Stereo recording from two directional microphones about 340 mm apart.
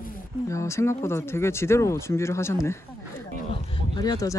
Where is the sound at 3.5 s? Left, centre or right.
Centre.